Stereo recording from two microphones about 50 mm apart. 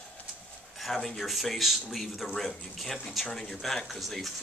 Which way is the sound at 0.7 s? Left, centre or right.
Centre.